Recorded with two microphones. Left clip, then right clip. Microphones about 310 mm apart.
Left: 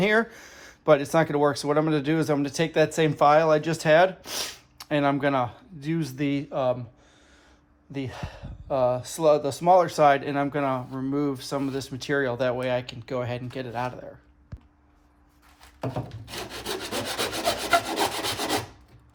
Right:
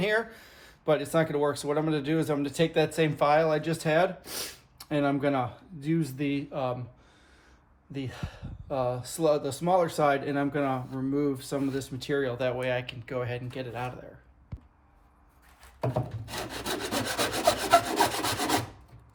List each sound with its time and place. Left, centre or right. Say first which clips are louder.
0.0 s speech: left 5 dB; centre
7.9 s speech: left 4 dB; centre
15.8 s wood: right 1 dB; centre